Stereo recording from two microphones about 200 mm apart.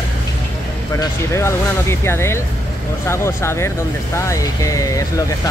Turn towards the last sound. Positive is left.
turn(degrees=15)  # may be behind; listen again after turning